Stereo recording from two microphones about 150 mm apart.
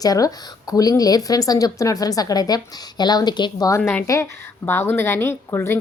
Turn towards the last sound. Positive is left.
turn(degrees=20)  # may be behind; listen again after turning